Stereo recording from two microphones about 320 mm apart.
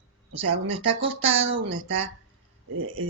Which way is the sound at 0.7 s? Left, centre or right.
Centre.